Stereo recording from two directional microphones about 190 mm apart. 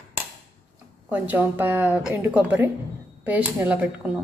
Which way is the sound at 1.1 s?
10° right (ahead or behind).